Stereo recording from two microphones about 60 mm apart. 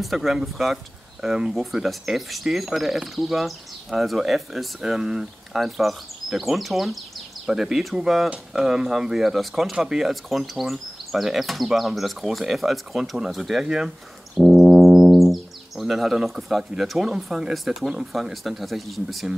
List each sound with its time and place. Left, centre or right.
0.0 s speech: centre